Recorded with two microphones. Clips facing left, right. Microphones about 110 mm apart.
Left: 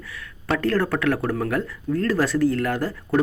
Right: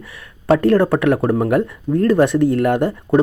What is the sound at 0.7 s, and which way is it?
Speech, 25° right (ahead or behind).